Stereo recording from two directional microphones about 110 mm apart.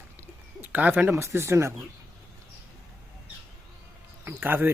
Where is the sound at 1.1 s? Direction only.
25° right (ahead or behind).